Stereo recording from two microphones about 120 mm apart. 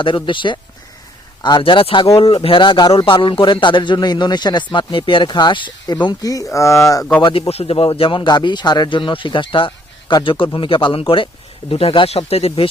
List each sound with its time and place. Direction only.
0.3 s speech: 40° left (ahead or behind)
6.1 s speech: 30° left (ahead or behind)
7.2 s speech: 45° left (ahead or behind)